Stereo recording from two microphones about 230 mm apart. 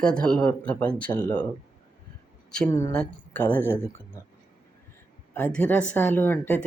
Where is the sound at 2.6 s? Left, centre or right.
Centre.